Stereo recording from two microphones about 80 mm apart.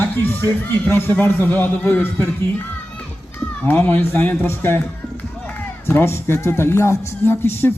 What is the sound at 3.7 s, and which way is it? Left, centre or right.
Speech, left.